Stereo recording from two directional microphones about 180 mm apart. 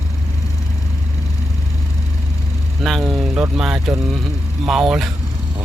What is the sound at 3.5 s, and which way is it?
Speech, 5° right (ahead or behind).